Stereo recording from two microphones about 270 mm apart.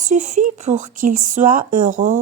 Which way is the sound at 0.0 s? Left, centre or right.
Right.